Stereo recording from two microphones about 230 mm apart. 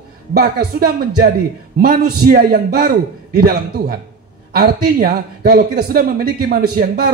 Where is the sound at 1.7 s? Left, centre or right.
Right.